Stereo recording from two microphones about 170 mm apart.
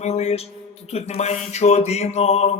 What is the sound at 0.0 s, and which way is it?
Speech, 40° left (ahead or behind).